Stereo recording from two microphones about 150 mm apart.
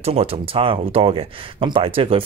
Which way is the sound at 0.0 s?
40° right (ahead or behind).